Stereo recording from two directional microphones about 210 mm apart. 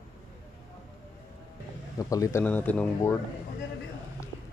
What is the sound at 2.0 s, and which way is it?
Speech, 15° left (ahead or behind).